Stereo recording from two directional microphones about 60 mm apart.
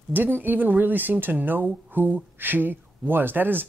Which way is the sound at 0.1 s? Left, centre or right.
Right.